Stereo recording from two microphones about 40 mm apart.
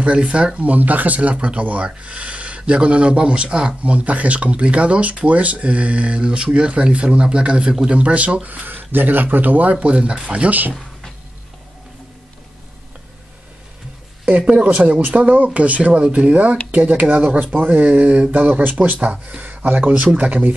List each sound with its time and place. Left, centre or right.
0.0 s speech: right
3.8 s speech: right
8.6 s speech: right
14.4 s speech: right
15.0 s speech: right
16.7 s speech: right
17.1 s speech: right
19.4 s a sound: right
19.9 s speech: right